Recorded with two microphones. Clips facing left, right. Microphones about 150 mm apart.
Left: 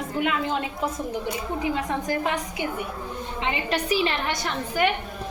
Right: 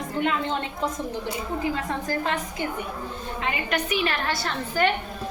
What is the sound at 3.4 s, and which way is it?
A woman's voice, 25° left (ahead or behind).